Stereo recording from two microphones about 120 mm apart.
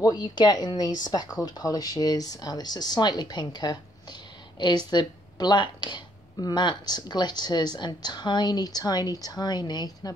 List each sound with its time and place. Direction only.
0.0 s speech: 35° left (ahead or behind)